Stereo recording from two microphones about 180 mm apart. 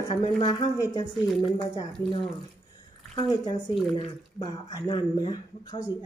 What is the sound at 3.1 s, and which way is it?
Speech, 20° left (ahead or behind).